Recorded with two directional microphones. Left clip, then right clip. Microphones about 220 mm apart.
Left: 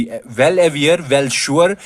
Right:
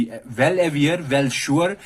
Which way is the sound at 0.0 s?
40° left (ahead or behind).